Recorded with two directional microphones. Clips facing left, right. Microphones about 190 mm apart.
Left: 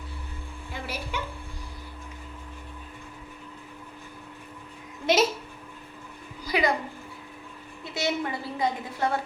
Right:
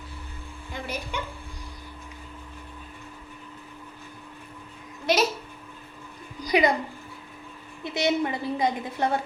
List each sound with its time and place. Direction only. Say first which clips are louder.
0.7 s music: right 1 dB; 5° left (ahead or behind)
5.1 s speech: left 1 dB; 20° left (ahead or behind)
6.4 s a sound: right 4 dB; 20° right (ahead or behind)
7.9 s a woman's voice: right 4 dB; 20° right (ahead or behind)